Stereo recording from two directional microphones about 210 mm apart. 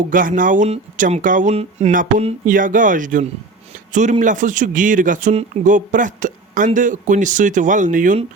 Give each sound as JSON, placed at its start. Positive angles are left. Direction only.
{"t": 0.1, "sound": "speech", "side_deg": -40}